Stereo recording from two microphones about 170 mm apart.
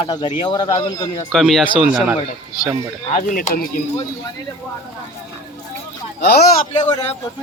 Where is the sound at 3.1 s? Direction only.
50° left (ahead or behind).